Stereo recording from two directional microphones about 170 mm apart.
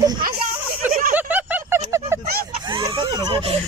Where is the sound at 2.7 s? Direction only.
25° right (ahead or behind).